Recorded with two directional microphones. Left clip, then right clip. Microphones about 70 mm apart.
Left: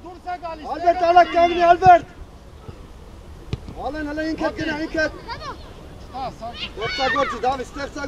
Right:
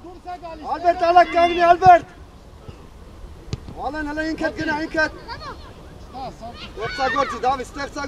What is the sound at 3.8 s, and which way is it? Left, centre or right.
A man's voice, right.